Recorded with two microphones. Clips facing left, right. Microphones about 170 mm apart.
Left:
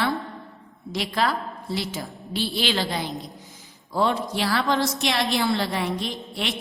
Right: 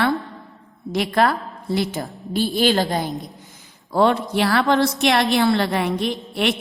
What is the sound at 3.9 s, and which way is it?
A woman's voice, 65° right (ahead or behind).